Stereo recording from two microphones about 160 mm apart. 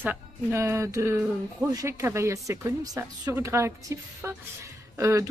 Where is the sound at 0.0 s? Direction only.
15° right (ahead or behind).